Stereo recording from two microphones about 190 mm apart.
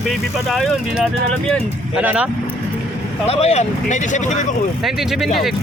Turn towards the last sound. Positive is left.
turn(degrees=0)  # may be behind; listen again after turning